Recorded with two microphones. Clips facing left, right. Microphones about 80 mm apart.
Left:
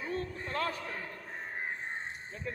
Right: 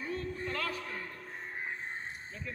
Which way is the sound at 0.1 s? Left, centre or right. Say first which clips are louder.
Left 1 dB; left.